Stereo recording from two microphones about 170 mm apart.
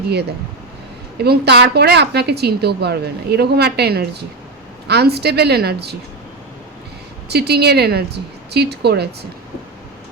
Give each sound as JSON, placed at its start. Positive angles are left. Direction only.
{"t": 0.1, "sound": "speech", "side_deg": -75}
{"t": 7.3, "sound": "speech", "side_deg": -70}